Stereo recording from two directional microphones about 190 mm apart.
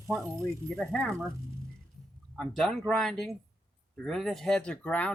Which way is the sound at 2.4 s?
Centre (ahead or behind).